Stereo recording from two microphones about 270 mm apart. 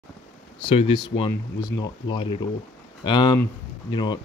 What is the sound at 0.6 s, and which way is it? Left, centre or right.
Speech, centre.